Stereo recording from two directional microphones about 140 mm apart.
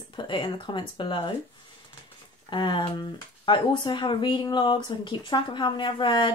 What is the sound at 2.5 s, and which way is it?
Speech, 35° left (ahead or behind).